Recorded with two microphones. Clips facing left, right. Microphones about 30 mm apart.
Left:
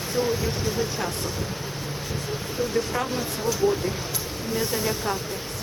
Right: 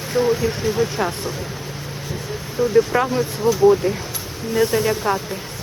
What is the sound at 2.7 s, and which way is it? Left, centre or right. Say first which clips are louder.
Speech: right 11 dB; right.